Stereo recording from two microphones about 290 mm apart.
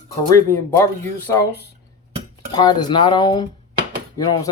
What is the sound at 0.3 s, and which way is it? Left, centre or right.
Speech, centre.